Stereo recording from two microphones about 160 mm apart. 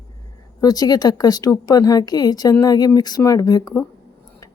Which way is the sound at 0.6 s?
25° left (ahead or behind).